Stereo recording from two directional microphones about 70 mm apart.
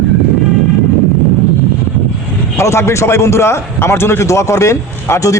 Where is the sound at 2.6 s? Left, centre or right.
Left.